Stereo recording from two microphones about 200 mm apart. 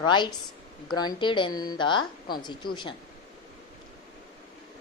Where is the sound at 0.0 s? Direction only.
20° left (ahead or behind).